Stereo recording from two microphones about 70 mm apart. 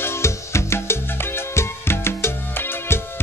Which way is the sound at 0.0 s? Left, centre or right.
Left.